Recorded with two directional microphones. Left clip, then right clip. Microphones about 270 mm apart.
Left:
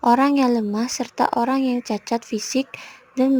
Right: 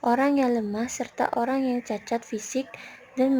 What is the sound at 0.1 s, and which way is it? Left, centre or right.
A woman's voice, left.